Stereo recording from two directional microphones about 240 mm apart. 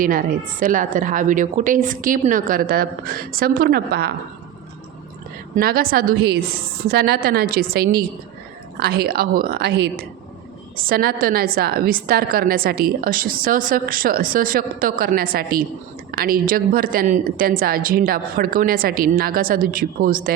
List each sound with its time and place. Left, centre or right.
0.0 s a woman's voice: right
5.5 s a woman's voice: right